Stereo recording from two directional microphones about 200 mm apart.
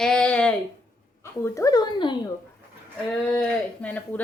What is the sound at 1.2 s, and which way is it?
Speech, 15° left (ahead or behind).